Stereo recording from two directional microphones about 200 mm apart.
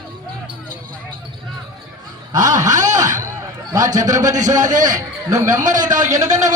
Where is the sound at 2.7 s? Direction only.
40° right (ahead or behind).